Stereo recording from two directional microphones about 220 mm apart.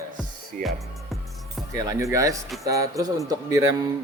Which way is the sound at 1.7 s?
15° right (ahead or behind).